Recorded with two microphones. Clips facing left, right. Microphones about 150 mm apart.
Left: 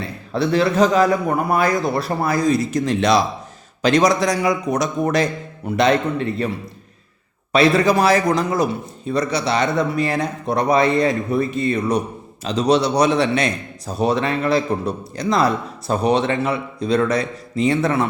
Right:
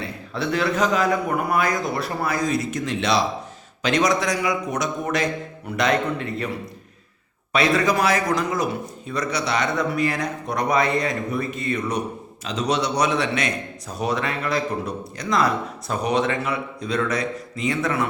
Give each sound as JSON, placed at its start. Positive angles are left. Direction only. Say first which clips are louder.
{"t": 0.0, "sound": "a man's voice", "louder": "left 5 dB", "side_deg": 35}
{"t": 7.5, "sound": "a man's voice", "louder": "left 5 dB", "side_deg": 30}